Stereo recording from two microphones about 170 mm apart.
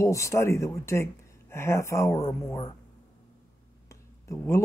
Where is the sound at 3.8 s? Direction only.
15° left (ahead or behind).